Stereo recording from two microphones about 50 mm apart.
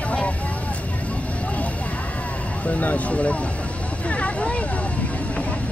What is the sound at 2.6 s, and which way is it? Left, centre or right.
Speech, left.